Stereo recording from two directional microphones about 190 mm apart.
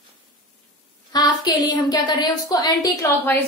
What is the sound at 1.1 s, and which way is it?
A woman's voice, 20° left (ahead or behind).